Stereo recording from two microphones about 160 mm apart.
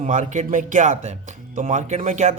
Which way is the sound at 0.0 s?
50° right (ahead or behind).